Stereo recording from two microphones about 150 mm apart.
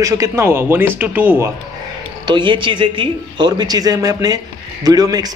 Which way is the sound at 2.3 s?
35° right (ahead or behind).